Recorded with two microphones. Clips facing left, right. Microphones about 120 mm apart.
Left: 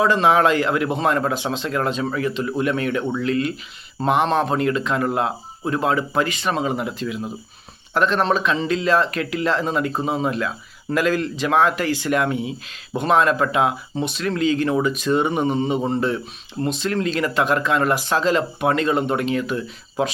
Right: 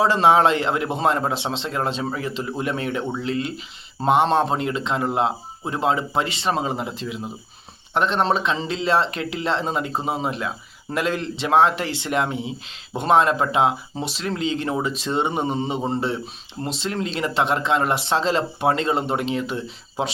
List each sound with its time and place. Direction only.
0.0 s speech: 30° right (ahead or behind)